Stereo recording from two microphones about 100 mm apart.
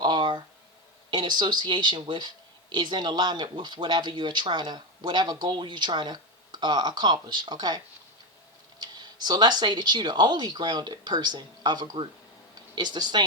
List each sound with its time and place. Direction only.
0.0 s a sound: 50° right (ahead or behind)
1.1 s speech: 45° right (ahead or behind)
8.8 s speech: 45° right (ahead or behind)